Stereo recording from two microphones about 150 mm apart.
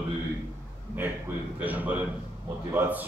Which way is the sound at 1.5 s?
10° right (ahead or behind).